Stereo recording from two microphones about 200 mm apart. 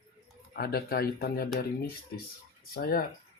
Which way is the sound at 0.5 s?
50° left (ahead or behind).